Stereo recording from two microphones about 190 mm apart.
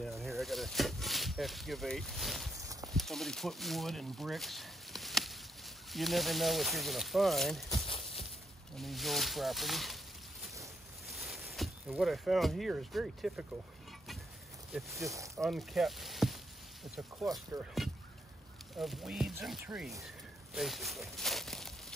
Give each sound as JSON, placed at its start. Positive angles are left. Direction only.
{"t": 0.0, "sound": "a sound", "side_deg": 0}
{"t": 2.6, "sound": "a sound", "side_deg": -15}
{"t": 2.9, "sound": "speech", "side_deg": 0}
{"t": 7.8, "sound": "a sound", "side_deg": 30}
{"t": 8.7, "sound": "speech", "side_deg": 0}
{"t": 11.1, "sound": "speech", "side_deg": 0}
{"t": 14.7, "sound": "speech", "side_deg": 0}
{"t": 15.0, "sound": "speech", "side_deg": -15}
{"t": 15.4, "sound": "speech", "side_deg": 0}
{"t": 17.8, "sound": "rowboat", "side_deg": 0}
{"t": 18.8, "sound": "speech", "side_deg": 0}
{"t": 20.5, "sound": "a sound", "side_deg": 0}